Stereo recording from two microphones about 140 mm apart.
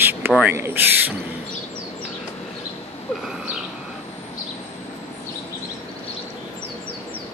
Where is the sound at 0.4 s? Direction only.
15° right (ahead or behind).